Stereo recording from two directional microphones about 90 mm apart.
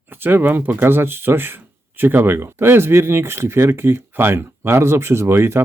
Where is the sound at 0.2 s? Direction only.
20° right (ahead or behind).